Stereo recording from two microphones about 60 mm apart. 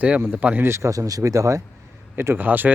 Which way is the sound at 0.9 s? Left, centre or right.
Right.